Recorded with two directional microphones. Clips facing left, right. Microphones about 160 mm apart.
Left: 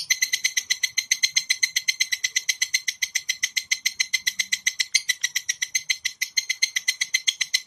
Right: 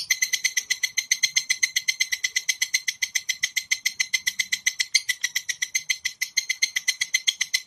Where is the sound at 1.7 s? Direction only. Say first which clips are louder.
Even; 35° right (ahead or behind).